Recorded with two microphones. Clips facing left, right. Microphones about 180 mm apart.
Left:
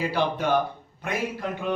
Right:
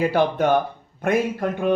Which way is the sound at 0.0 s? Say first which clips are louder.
Right 6 dB; 50° right (ahead or behind).